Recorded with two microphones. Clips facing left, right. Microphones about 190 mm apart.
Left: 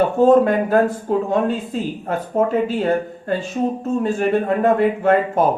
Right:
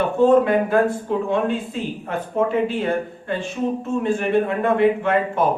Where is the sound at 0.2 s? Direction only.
40° left (ahead or behind).